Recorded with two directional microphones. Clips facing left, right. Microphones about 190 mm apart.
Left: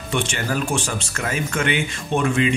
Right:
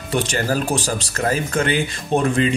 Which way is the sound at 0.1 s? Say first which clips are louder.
Right 3 dB; 35° right (ahead or behind).